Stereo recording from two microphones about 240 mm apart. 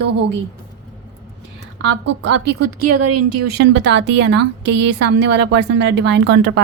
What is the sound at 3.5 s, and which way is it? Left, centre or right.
A woman's voice, right.